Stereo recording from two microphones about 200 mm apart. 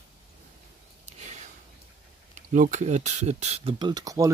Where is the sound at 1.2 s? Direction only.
35° right (ahead or behind).